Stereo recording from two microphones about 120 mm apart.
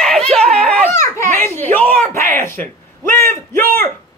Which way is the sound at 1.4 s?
15° left (ahead or behind).